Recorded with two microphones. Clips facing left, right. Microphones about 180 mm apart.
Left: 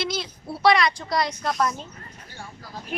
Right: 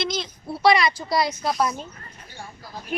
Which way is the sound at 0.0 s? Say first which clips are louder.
Right 1 dB; 5° left (ahead or behind).